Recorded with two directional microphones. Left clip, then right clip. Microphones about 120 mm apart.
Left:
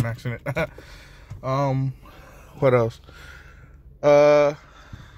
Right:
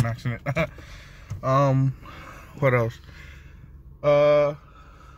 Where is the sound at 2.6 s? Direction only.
20° left (ahead or behind).